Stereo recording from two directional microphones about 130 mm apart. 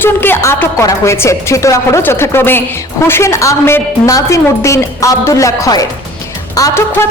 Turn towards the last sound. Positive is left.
turn(degrees=25)  # may be behind; listen again after turning